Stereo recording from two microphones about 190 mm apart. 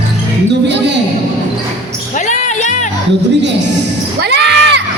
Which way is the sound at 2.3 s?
40° left (ahead or behind).